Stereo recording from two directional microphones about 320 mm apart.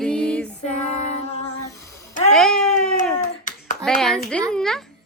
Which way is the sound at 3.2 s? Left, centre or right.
Left.